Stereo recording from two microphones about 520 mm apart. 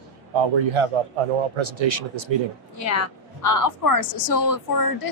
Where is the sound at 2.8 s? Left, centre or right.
Left.